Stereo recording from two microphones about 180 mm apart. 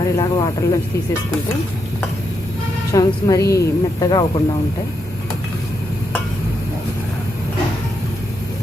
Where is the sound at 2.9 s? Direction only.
20° left (ahead or behind).